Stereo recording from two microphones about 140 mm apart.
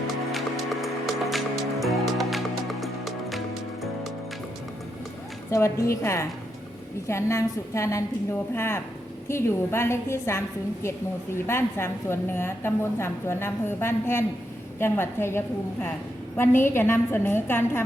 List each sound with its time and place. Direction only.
0.3 s music: centre (ahead or behind)
5.5 s a woman's voice: 20° left (ahead or behind)
11.4 s a woman's voice: 20° left (ahead or behind)